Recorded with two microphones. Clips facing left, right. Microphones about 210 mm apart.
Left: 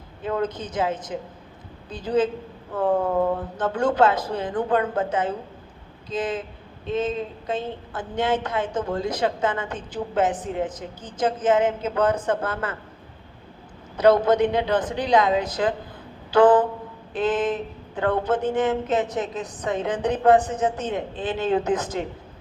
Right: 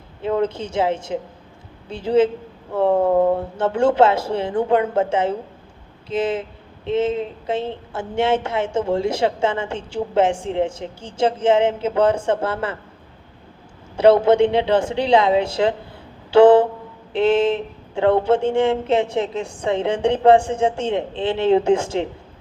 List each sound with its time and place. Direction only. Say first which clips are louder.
0.2 s speech: right 5 dB; 25° right (ahead or behind)
3.6 s speech: right 4 dB; 25° right (ahead or behind)
13.9 s a man's voice: right 4 dB; 25° right (ahead or behind)
16.3 s a sound: right 5 dB; 25° right (ahead or behind)
17.1 s speech: right 6 dB; 25° right (ahead or behind)